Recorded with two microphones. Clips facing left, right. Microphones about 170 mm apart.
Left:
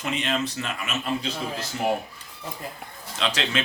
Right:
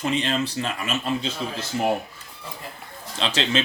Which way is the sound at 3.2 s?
25° right (ahead or behind).